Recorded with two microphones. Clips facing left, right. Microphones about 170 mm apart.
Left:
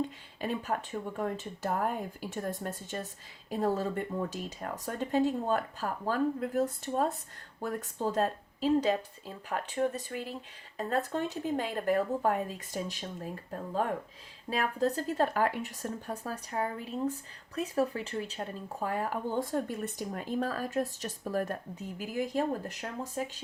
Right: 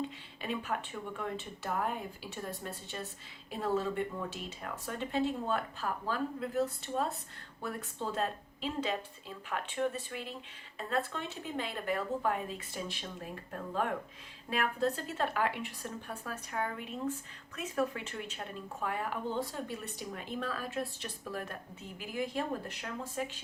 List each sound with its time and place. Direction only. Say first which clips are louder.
0.0 s speech: left 5 dB; 40° left (ahead or behind)
14.5 s speech: left 2 dB; 35° left (ahead or behind)